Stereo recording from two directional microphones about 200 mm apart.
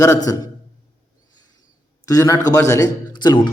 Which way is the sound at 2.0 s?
15° left (ahead or behind).